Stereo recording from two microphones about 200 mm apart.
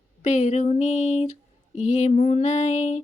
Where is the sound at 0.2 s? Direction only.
35° left (ahead or behind).